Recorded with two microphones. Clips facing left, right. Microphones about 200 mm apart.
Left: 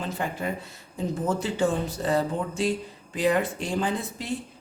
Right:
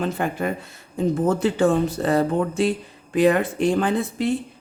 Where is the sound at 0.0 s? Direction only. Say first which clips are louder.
Right 6 dB; 60° right (ahead or behind).